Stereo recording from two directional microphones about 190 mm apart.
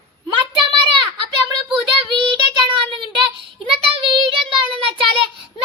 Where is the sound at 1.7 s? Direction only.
25° right (ahead or behind).